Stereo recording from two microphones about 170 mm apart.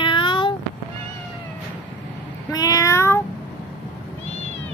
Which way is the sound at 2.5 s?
20° left (ahead or behind).